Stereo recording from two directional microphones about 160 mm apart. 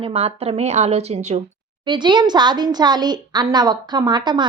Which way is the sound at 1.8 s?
30° right (ahead or behind).